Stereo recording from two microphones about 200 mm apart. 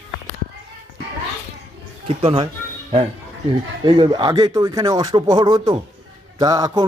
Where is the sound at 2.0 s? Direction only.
30° right (ahead or behind).